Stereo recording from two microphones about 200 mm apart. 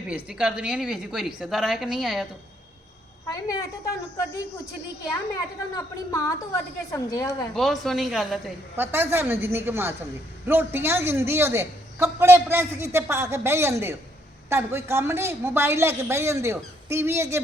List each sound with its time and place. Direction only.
0.1 s a woman's voice: 5° right (ahead or behind)
3.2 s a woman's voice: 15° left (ahead or behind)
5.7 s a woman's voice: 15° left (ahead or behind)
7.5 s a woman's voice: centre (ahead or behind)